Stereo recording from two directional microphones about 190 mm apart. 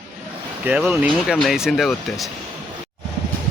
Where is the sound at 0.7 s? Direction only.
5° right (ahead or behind).